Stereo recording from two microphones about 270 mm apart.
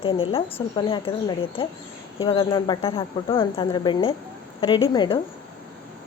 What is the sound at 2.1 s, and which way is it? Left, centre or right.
A woman's voice, centre.